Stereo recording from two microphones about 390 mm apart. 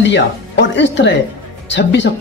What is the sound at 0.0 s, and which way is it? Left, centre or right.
Speech, left.